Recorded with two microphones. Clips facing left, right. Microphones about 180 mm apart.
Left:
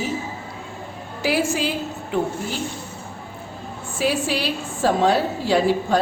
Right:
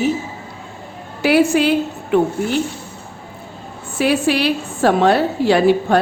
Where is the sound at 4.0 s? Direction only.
65° right (ahead or behind).